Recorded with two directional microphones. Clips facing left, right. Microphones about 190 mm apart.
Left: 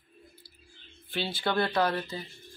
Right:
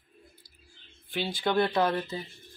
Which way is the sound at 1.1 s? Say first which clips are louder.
Right 2 dB; 15° right (ahead or behind).